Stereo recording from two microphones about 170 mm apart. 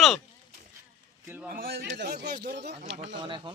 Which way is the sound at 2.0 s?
75° right (ahead or behind).